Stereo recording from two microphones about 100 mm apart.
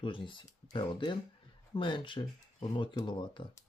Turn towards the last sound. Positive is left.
turn(degrees=55)  # may be behind; listen again after turning